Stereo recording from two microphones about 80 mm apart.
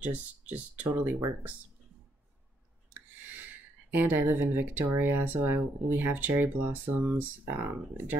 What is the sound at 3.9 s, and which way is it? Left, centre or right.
Speech, right.